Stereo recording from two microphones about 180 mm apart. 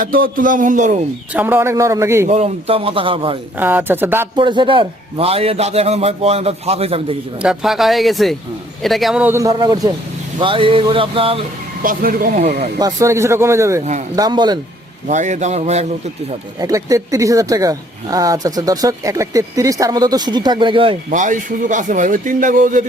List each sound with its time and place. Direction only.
0.0 s a man's voice: 55° right (ahead or behind)
1.3 s a man's voice: 10° right (ahead or behind)
2.2 s a man's voice: 35° right (ahead or behind)
3.6 s a man's voice: 10° right (ahead or behind)
4.4 s a man's voice: 25° right (ahead or behind)
7.4 s a man's voice: centre (ahead or behind); by 11.3 s 30° right (ahead or behind)
11.8 s a man's voice: 50° right (ahead or behind)
12.8 s a man's voice: 15° right (ahead or behind)
15.0 s a man's voice: 45° right (ahead or behind)
16.6 s speech: 20° right (ahead or behind)
21.1 s a man's voice: 45° right (ahead or behind)